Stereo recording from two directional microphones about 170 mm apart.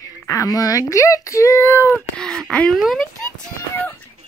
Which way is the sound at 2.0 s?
5° left (ahead or behind).